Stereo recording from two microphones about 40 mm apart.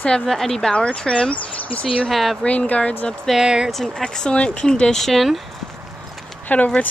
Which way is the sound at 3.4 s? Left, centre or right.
Centre.